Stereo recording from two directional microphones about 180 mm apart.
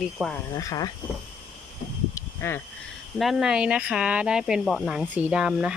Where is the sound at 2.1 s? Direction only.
15° left (ahead or behind).